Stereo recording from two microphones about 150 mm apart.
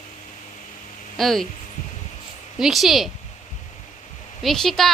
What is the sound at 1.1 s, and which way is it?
Speech, centre (ahead or behind).